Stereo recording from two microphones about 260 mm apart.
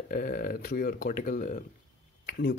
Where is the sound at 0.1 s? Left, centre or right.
Left.